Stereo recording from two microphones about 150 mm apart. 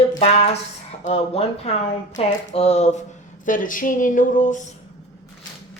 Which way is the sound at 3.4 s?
60° left (ahead or behind).